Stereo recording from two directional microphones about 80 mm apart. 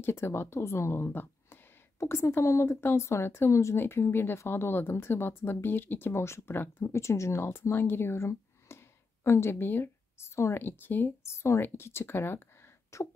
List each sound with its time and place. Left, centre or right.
0.0 s speech: left